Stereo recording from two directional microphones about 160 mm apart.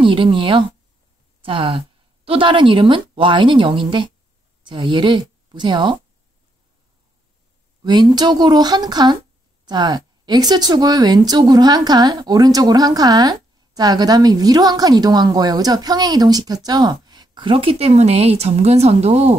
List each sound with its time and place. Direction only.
0.0 s a woman's voice: 35° right (ahead or behind)
7.8 s speech: 25° right (ahead or behind); by 19.3 s 40° right (ahead or behind)